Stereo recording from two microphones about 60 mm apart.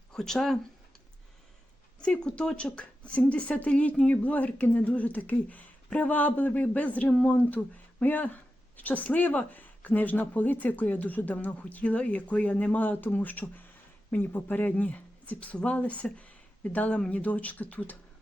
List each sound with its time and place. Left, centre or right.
0.1 s speech: centre
2.0 s speech: centre
16.1 s a sound: left
17.1 s speech: left